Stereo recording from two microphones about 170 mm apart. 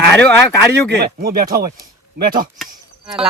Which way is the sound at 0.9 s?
65° right (ahead or behind).